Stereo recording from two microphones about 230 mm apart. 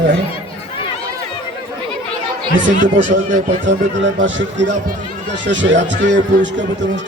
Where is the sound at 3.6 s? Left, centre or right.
Right.